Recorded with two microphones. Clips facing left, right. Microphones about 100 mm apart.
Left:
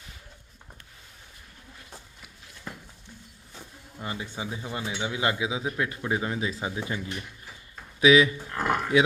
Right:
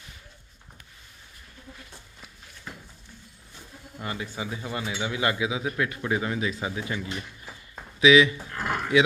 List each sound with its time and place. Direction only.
4.0 s speech: 25° left (ahead or behind)
8.0 s speech: 40° left (ahead or behind)